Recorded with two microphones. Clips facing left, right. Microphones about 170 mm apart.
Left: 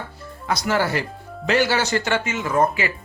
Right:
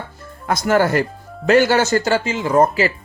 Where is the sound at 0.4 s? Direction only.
50° right (ahead or behind).